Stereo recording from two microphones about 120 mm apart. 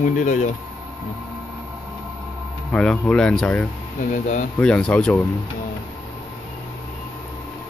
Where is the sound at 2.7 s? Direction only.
10° left (ahead or behind).